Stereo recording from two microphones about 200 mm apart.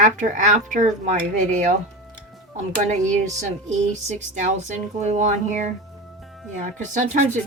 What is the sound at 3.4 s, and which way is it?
Speech, 35° right (ahead or behind).